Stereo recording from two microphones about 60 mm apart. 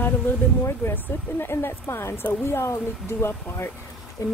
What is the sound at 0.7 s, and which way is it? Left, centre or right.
Speech, left.